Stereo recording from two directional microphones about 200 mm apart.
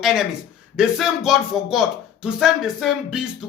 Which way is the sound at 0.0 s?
Centre (ahead or behind).